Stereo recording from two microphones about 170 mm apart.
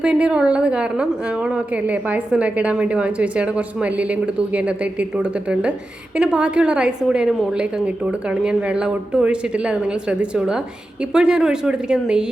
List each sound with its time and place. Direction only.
0.0 s a woman's voice: 5° right (ahead or behind)